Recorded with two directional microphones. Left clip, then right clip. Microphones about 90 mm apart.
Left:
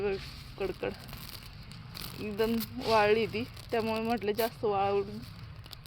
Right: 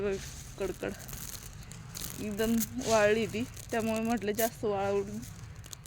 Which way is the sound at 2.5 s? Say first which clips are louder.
Even; 65° left (ahead or behind).